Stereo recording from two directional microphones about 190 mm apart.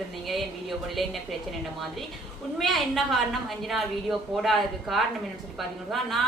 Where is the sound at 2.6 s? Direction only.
Centre (ahead or behind).